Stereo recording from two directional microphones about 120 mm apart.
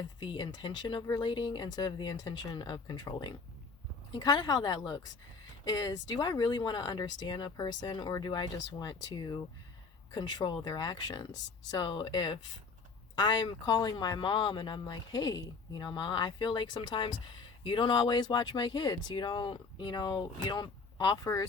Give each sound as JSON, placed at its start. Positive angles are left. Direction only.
{"t": 0.2, "sound": "speech", "side_deg": 40}